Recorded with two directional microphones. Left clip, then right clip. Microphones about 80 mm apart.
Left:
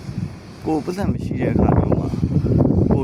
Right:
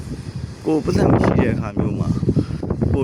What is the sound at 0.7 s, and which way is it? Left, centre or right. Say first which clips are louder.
Speech: right 5 dB; right.